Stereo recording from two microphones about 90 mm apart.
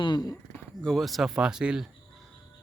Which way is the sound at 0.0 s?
50° left (ahead or behind).